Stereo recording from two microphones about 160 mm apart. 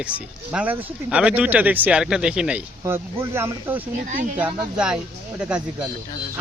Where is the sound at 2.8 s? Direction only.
15° right (ahead or behind).